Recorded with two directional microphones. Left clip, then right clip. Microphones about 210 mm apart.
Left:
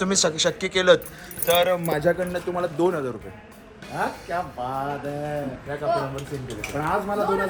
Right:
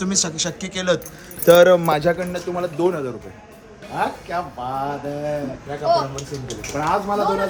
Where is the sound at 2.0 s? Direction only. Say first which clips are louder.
Right 2 dB; centre (ahead or behind).